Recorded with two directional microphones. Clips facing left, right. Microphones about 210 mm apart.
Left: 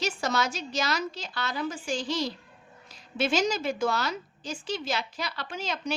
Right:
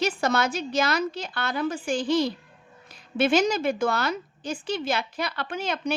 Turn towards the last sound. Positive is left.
turn(degrees=-55)  # may be behind; listen again after turning